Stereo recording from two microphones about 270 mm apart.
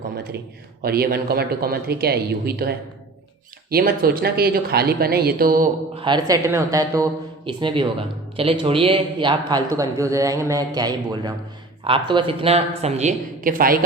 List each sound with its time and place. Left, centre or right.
0.8 s speech: right
6.0 s speech: centre; by 13.7 s right